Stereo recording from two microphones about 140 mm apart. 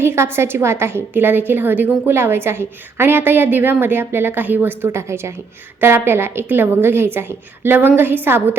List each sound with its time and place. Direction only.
0.0 s a woman's voice: 15° right (ahead or behind)